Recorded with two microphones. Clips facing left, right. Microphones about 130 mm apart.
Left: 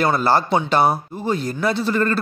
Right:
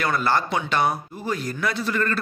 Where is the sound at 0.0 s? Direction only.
30° left (ahead or behind).